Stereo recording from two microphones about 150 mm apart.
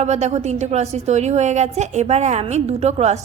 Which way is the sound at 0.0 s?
50° right (ahead or behind).